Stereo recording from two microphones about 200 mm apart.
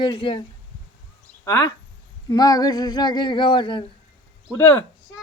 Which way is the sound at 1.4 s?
15° left (ahead or behind).